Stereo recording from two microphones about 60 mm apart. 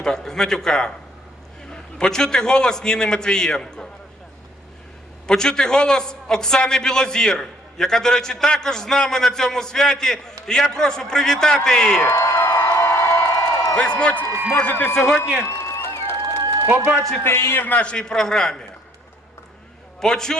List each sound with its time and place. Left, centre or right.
0.0 s a man's voice: centre
5.3 s a man's voice: centre
12.0 s a sound: left
13.7 s a man's voice: centre
14.6 s a man's voice: left
14.9 s a man's voice: centre
15.4 s a sound: left
16.2 s a sound: right
17.2 s a man's voice: left
17.7 s a man's voice: centre
20.0 s a man's voice: centre